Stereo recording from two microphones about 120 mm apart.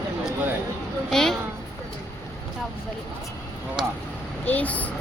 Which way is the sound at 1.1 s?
5° left (ahead or behind).